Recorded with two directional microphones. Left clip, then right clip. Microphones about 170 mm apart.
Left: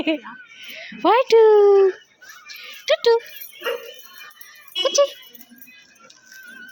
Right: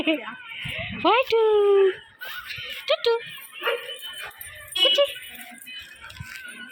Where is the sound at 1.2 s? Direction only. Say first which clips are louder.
Left 7 dB; 40° left (ahead or behind).